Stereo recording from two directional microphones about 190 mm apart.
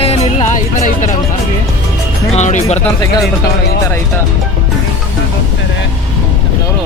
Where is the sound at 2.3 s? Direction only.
35° left (ahead or behind).